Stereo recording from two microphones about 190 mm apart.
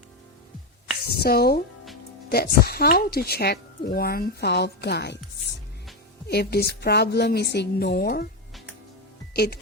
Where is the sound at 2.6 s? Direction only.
55° left (ahead or behind).